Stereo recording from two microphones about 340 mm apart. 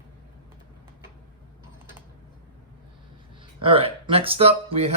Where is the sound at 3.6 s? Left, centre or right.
Centre.